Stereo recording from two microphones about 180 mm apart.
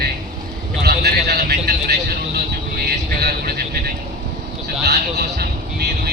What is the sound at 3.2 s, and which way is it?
Speech, 60° right (ahead or behind).